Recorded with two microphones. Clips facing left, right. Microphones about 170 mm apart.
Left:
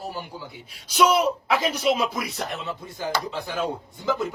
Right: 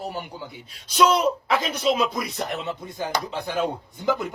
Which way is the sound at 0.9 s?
10° left (ahead or behind).